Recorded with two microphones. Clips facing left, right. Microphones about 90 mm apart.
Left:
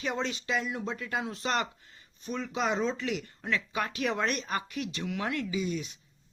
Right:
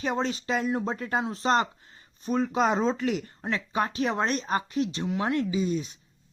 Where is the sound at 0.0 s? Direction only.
35° right (ahead or behind).